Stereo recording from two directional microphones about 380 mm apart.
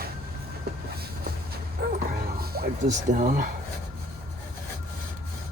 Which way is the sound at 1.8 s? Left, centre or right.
Right.